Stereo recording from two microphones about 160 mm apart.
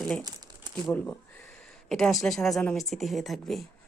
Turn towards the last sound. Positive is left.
turn(degrees=0)  # may be behind; listen again after turning